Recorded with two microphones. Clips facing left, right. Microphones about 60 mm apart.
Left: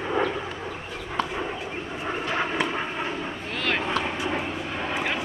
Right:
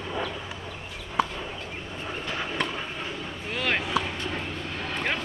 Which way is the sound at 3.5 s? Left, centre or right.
Centre.